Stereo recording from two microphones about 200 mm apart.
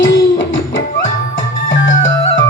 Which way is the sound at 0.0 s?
70° left (ahead or behind).